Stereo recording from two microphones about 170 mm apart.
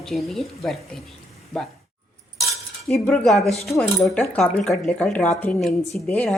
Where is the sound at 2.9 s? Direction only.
Centre (ahead or behind).